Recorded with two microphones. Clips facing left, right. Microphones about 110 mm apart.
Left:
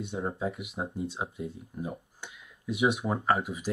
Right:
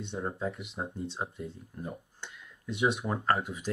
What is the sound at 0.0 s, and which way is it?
Speech, 5° left (ahead or behind).